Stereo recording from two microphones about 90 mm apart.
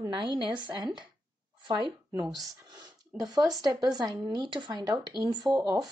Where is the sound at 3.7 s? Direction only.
50° right (ahead or behind).